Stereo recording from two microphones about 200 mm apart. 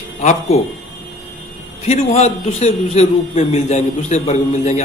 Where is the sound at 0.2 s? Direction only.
30° left (ahead or behind).